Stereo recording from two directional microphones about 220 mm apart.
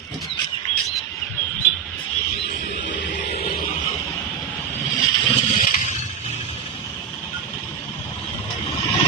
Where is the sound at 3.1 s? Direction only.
35° left (ahead or behind).